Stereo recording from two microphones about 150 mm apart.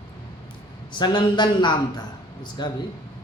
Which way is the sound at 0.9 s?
30° left (ahead or behind).